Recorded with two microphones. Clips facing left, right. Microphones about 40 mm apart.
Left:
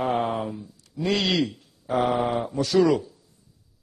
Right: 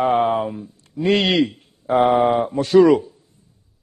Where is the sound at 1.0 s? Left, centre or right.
Right.